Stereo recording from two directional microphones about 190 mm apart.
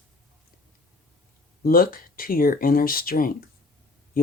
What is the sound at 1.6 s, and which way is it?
Speech, 50° left (ahead or behind).